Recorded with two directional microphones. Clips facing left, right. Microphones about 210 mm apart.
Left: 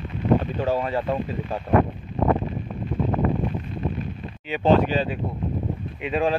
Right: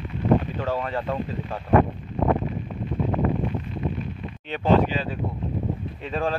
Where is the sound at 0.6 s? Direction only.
10° left (ahead or behind).